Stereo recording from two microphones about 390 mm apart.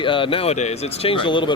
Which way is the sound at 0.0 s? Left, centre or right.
Centre.